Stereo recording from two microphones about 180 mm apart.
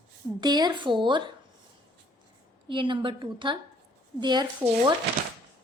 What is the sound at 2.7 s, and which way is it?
A woman's voice, 25° right (ahead or behind).